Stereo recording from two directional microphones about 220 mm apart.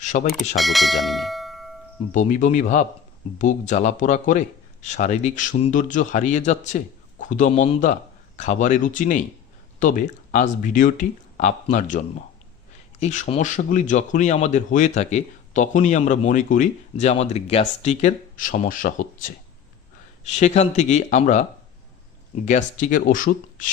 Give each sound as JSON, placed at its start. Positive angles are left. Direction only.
{"t": 0.0, "sound": "speech", "side_deg": 35}
{"t": 0.5, "sound": "speech", "side_deg": 0}
{"t": 2.1, "sound": "speech", "side_deg": 35}
{"t": 22.4, "sound": "speech", "side_deg": 35}